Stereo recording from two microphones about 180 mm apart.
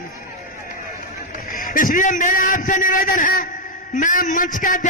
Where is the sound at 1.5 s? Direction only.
50° left (ahead or behind).